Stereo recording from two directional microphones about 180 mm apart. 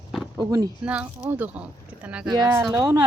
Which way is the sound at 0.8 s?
5° right (ahead or behind).